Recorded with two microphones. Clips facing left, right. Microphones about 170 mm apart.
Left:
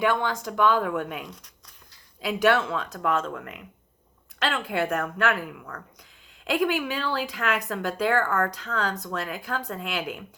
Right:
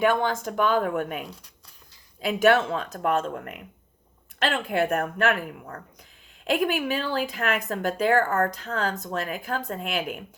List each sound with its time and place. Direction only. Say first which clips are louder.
0.0 s speech: right 2 dB; 45° right (ahead or behind)
1.3 s speech: right 1 dB; 30° right (ahead or behind)
2.2 s speech: right 2 dB; 50° right (ahead or behind)
4.4 s speech: right 2 dB; 50° right (ahead or behind)